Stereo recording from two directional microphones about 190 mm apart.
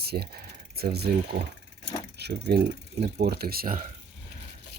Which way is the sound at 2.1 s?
60° right (ahead or behind).